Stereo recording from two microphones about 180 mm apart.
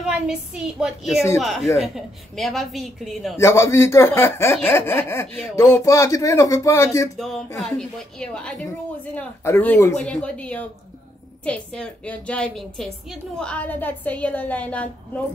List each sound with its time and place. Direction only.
0.0 s a woman's voice: 5° right (ahead or behind)
3.3 s a woman's voice: 15° left (ahead or behind)
7.2 s a woman's voice: centre (ahead or behind)